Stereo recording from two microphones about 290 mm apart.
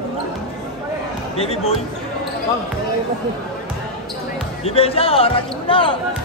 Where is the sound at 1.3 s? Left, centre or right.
Left.